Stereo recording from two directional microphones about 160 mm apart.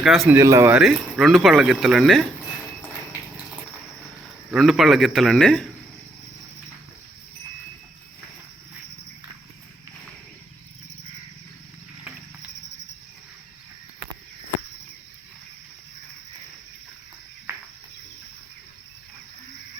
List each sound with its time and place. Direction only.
0.0 s speech: centre (ahead or behind)
0.3 s speech: 20° right (ahead or behind)
0.7 s speech: 5° right (ahead or behind)
4.5 s speech: centre (ahead or behind)
17.5 s cricket: 15° right (ahead or behind)